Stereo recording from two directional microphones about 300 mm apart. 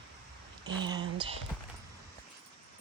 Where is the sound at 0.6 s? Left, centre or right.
Centre.